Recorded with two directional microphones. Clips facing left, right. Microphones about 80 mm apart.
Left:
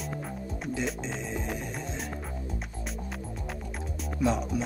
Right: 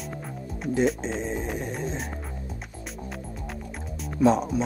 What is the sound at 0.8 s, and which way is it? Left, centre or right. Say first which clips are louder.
Speech: right 7 dB; centre.